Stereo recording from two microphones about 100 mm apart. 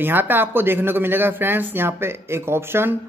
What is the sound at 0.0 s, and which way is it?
Speech, 20° right (ahead or behind).